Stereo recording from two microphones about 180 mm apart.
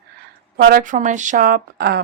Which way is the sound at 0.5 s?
55° right (ahead or behind).